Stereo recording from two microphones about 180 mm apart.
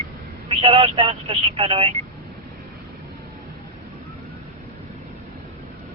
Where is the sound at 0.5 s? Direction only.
30° right (ahead or behind).